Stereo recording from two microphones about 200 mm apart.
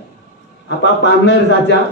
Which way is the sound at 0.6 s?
60° left (ahead or behind).